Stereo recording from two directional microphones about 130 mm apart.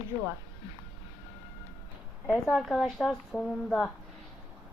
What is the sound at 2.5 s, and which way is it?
A woman's voice, centre (ahead or behind).